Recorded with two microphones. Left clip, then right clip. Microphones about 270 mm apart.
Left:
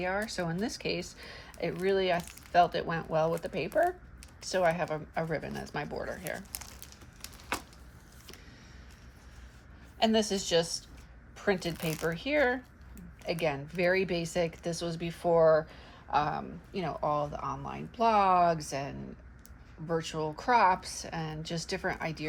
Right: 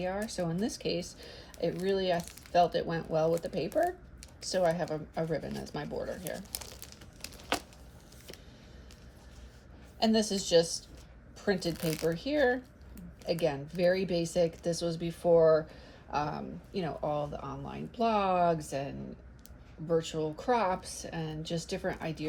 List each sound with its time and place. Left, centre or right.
0.0 s speech: centre
6.5 s crumpling: centre
10.0 s a woman's voice: centre